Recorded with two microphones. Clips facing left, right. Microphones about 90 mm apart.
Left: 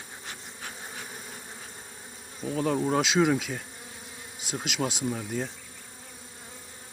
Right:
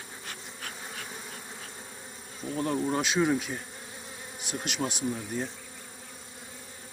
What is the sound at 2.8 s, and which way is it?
Speech, 90° left.